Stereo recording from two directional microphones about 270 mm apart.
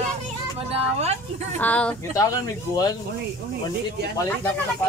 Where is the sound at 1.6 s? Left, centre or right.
Centre.